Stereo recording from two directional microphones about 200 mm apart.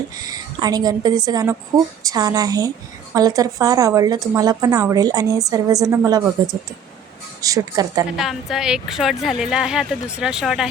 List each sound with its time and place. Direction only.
0.3 s a woman's voice: 20° right (ahead or behind)
8.1 s speech: centre (ahead or behind)